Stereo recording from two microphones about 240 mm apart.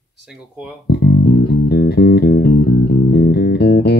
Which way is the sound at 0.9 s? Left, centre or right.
Left.